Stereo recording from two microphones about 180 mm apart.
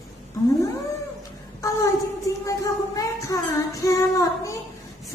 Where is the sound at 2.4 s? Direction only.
20° left (ahead or behind).